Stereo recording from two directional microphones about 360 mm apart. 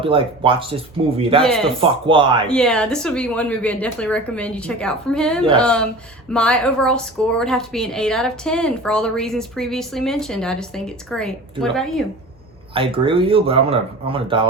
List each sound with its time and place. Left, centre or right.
0.0 s speech: centre
2.5 s a woman's voice: centre
12.7 s speech: centre